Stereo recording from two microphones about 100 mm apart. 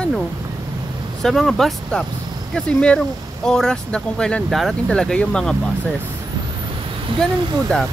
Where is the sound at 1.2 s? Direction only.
5° left (ahead or behind).